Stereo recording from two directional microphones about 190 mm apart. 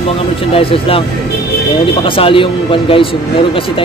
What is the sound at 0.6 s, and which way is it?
Speech, 30° left (ahead or behind).